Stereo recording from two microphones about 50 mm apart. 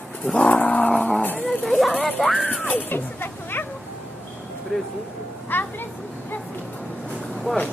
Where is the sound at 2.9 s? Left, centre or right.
Left.